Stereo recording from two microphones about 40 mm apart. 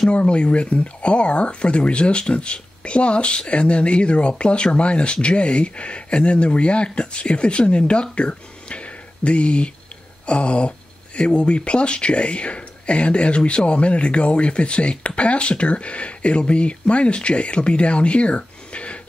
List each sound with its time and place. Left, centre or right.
0.1 s speech: left